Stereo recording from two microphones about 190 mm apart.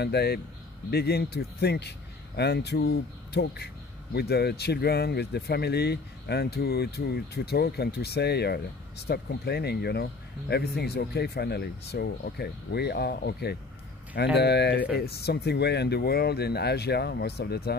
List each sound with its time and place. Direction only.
0.0 s speech: 60° left (ahead or behind)